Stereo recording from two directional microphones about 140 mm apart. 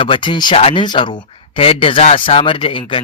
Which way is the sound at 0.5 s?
45° left (ahead or behind).